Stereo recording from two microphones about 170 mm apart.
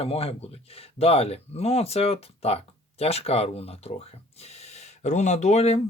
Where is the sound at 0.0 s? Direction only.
35° left (ahead or behind).